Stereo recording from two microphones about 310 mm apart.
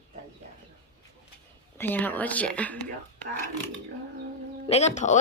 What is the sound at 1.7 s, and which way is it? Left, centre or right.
Speech, centre.